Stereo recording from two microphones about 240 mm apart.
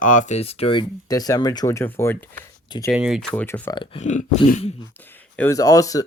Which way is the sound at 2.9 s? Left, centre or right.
Centre.